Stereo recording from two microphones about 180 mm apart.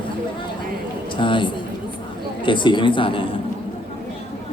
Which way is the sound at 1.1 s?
25° left (ahead or behind).